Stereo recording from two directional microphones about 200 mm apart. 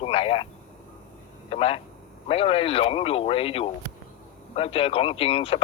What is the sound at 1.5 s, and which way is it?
Speech, 30° left (ahead or behind).